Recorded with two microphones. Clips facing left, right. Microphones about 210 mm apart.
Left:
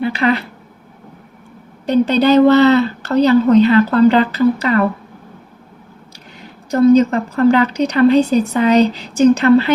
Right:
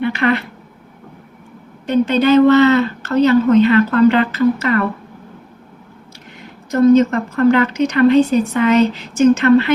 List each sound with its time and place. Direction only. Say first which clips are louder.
0.1 s speech: even; 35° left (ahead or behind)
1.9 s speech: left 1 dB; 35° left (ahead or behind)
6.7 s speech: even; 30° left (ahead or behind)